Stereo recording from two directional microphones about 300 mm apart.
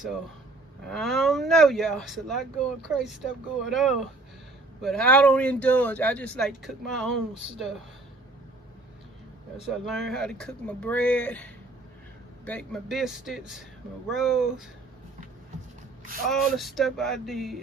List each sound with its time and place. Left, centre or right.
0.9 s speech: centre
9.6 s speech: centre
16.2 s speech: centre